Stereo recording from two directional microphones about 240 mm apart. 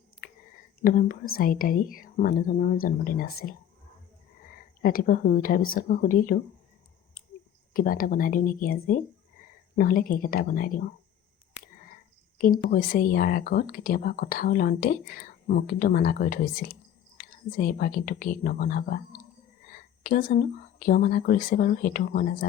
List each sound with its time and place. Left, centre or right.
0.2 s a sound: left
0.9 s speech: left
4.8 s speech: left
7.7 s speech: left
12.4 s speech: left